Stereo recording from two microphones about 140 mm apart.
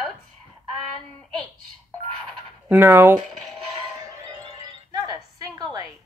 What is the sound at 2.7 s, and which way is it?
Speech, 15° right (ahead or behind).